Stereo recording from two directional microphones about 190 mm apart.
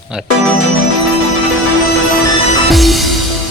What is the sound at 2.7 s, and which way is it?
Music, centre (ahead or behind).